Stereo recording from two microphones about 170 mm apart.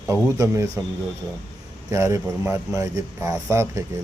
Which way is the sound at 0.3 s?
15° right (ahead or behind).